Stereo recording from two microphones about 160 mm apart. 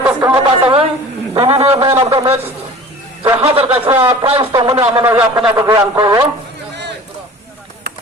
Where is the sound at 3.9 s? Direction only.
15° right (ahead or behind).